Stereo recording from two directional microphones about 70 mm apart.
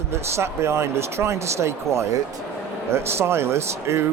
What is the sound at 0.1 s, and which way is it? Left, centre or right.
Speech, right.